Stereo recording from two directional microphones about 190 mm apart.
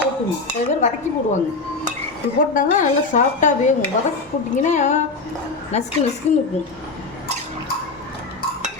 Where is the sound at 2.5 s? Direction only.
45° left (ahead or behind).